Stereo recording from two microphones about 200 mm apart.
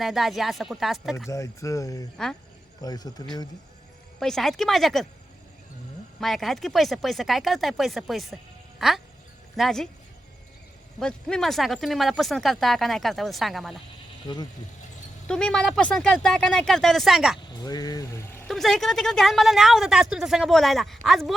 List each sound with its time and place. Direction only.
0.0 s a woman's voice: centre (ahead or behind)
1.3 s speech: 15° left (ahead or behind)
4.2 s a woman's voice: centre (ahead or behind)
6.1 s a woman's voice: centre (ahead or behind)
11.0 s a woman's voice: 5° left (ahead or behind)
14.3 s speech: 20° left (ahead or behind)
15.3 s a woman's voice: 5° left (ahead or behind)
17.6 s speech: 20° left (ahead or behind)
18.4 s a woman's voice: centre (ahead or behind)